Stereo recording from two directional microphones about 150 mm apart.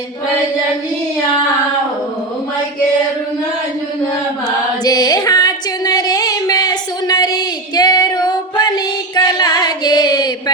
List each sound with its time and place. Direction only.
4.8 s female singing: 25° left (ahead or behind)